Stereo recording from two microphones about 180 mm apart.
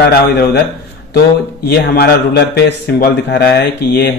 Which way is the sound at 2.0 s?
65° left (ahead or behind).